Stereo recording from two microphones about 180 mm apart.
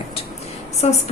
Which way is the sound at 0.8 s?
35° left (ahead or behind).